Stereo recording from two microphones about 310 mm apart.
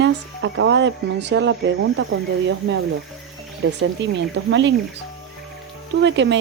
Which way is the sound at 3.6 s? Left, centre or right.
Right.